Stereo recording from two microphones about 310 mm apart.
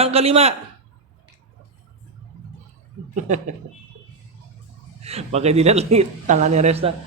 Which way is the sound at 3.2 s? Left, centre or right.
Right.